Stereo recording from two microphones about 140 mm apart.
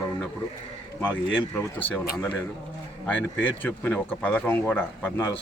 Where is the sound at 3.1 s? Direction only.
10° left (ahead or behind).